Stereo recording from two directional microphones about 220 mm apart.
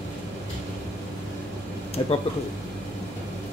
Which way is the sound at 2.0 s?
25° left (ahead or behind).